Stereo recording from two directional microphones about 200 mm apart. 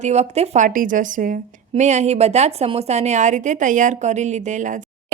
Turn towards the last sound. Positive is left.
turn(degrees=-40)  # may be behind; listen again after turning